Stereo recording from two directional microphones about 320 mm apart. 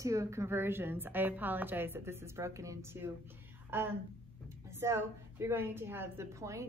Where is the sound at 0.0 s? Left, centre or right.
Centre.